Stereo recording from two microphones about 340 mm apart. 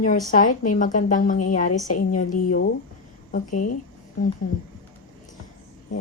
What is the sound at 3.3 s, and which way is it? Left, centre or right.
Speech, left.